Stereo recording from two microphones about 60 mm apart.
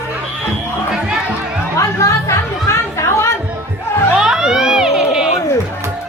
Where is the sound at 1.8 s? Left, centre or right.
Left.